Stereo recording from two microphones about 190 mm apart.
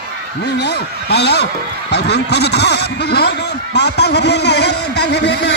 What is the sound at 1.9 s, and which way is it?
A man's voice, 60° left (ahead or behind).